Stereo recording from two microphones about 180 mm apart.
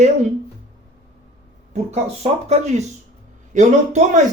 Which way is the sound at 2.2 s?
35° right (ahead or behind).